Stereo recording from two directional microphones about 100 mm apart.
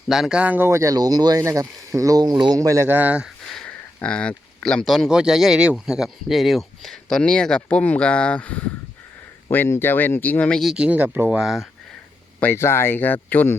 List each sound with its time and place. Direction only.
0.1 s speech: 5° right (ahead or behind)
0.7 s speech: 30° right (ahead or behind); by 3.2 s 15° right (ahead or behind)
3.4 s speech: 10° left (ahead or behind)
10.6 s speech: centre (ahead or behind)
10.8 s speech: 15° right (ahead or behind)
12.4 s speech: 25° left (ahead or behind)